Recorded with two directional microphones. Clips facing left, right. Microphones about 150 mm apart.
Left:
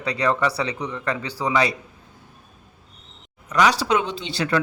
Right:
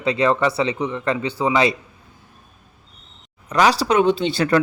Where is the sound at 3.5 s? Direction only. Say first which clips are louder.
Right 2 dB; 35° right (ahead or behind).